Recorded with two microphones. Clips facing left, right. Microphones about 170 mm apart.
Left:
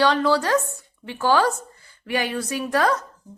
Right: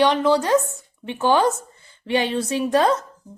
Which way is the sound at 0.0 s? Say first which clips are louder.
Right 2 dB; 20° right (ahead or behind).